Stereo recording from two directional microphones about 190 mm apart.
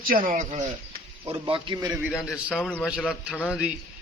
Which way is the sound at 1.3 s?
25° right (ahead or behind).